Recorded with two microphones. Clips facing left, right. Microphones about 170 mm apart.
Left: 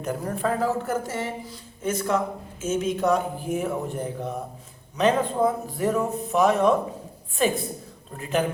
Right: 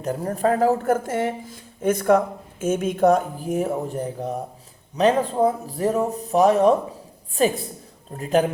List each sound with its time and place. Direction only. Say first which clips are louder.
0.0 s speech: right 4 dB; 35° right (ahead or behind)